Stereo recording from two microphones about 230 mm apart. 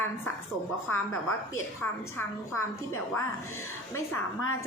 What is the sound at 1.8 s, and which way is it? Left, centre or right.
Speech, centre.